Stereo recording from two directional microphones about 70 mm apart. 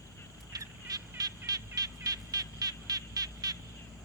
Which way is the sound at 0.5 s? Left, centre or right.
Right.